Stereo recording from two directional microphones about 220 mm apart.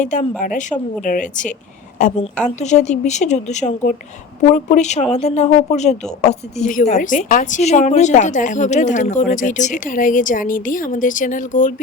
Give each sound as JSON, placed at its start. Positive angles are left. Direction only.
{"t": 0.0, "sound": "speech", "side_deg": 35}